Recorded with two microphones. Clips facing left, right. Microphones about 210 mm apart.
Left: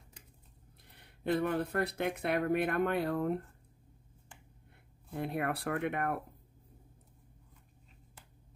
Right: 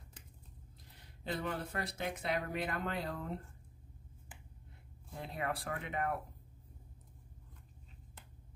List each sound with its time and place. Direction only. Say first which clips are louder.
0.8 s speech: left 9 dB; 60° left (ahead or behind)
5.1 s speech: left 5 dB; 60° left (ahead or behind)